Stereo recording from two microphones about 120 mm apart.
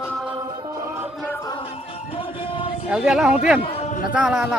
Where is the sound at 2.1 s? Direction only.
45° left (ahead or behind).